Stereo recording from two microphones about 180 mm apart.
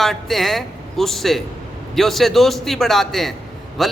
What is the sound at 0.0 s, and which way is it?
A man's voice, centre (ahead or behind).